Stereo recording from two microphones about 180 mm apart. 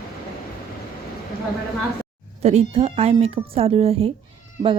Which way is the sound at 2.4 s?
35° right (ahead or behind).